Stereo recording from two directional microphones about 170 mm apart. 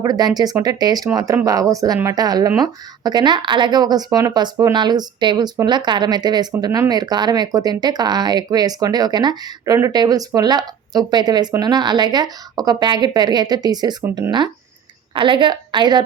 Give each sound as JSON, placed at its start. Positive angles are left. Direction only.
{"t": 0.0, "sound": "speech", "side_deg": -20}